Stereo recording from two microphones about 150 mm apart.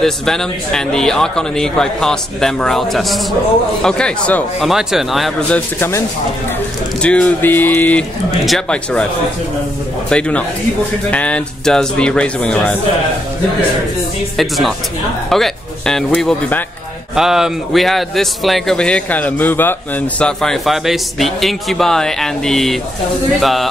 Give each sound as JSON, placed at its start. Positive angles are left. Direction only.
{"t": 0.0, "sound": "speech", "side_deg": 5}
{"t": 5.8, "sound": "speech", "side_deg": 20}
{"t": 10.0, "sound": "speech", "side_deg": 5}
{"t": 14.3, "sound": "speech", "side_deg": 0}